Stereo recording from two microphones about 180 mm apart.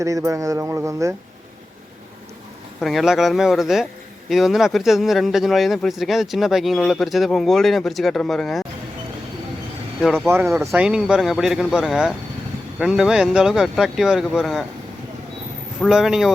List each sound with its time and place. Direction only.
0.0 s speech: 15° right (ahead or behind)
2.8 s speech: centre (ahead or behind)
10.0 s speech: centre (ahead or behind)
10.2 s speech: 15° right (ahead or behind)
10.7 s speech: 5° right (ahead or behind)
15.9 s speech: 5° right (ahead or behind)